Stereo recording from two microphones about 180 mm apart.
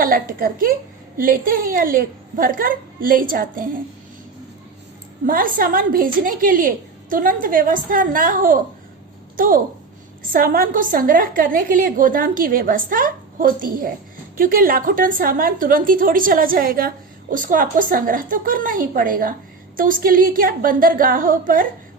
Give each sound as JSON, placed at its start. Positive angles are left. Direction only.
{"t": 0.0, "sound": "a woman's voice", "side_deg": -50}
{"t": 5.2, "sound": "a woman's voice", "side_deg": -50}